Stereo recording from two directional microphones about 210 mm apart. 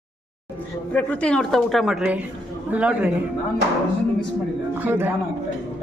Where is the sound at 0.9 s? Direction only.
5° left (ahead or behind).